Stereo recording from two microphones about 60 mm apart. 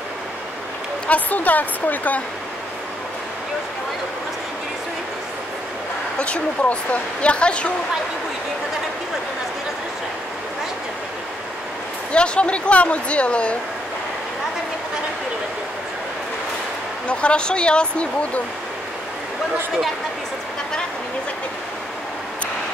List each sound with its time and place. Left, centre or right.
1.0 s speech: left
6.1 s speech: centre
12.1 s speech: centre
17.1 s speech: centre